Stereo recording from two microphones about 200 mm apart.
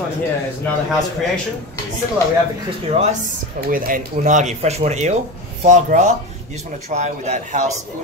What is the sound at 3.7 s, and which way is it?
Speech, 40° right (ahead or behind).